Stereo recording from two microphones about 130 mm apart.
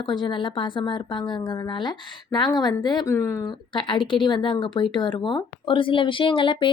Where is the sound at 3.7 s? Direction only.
40° left (ahead or behind).